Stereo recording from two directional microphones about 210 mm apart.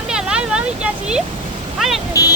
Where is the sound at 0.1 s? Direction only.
5° right (ahead or behind).